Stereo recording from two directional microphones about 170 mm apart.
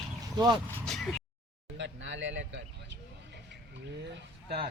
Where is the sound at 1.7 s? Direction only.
90° right.